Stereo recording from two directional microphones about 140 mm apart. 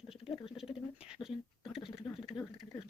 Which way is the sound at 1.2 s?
5° right (ahead or behind).